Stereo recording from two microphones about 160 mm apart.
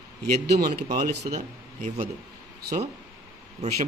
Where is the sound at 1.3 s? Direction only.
45° right (ahead or behind).